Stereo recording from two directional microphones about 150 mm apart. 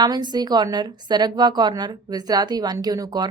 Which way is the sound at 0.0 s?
30° right (ahead or behind).